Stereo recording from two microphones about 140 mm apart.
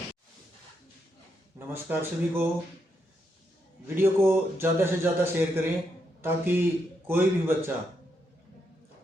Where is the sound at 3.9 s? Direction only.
15° right (ahead or behind).